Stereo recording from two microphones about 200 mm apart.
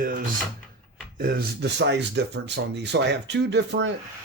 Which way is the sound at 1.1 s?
50° right (ahead or behind).